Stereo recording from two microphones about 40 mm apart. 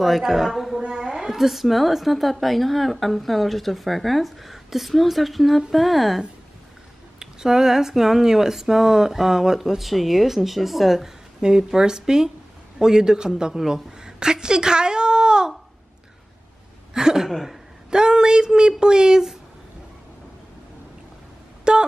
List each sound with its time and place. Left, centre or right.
0.0 s a woman's voice: centre
0.5 s a sound: centre
0.7 s a woman's voice: centre
7.2 s speech: centre
11.4 s speech: centre
13.6 s speech: centre
13.9 s a sound: centre
16.9 s speech: centre
17.3 s a woman's voice: centre
17.8 s speech: centre
21.7 s a sound: right